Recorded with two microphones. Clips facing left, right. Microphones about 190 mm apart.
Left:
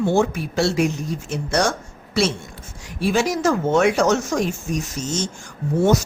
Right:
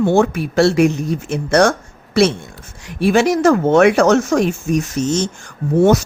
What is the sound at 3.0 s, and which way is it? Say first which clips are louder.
Speech: right 6 dB; 65° right (ahead or behind).